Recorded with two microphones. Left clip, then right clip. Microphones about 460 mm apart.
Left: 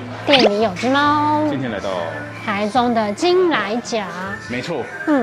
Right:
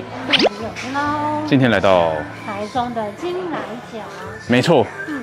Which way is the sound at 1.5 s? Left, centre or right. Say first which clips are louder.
Right 9 dB; right.